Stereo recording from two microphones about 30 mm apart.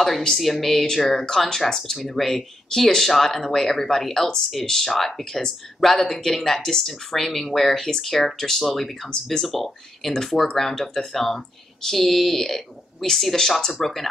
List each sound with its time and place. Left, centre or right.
0.4 s speech: centre
5.2 s speech: centre
5.8 s speech: centre
6.2 s speech: centre
9.1 s speech: left
9.5 s speech: centre